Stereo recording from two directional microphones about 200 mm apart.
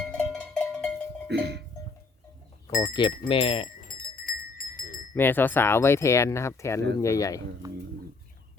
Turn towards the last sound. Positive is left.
turn(degrees=-15)  # may be behind; listen again after turning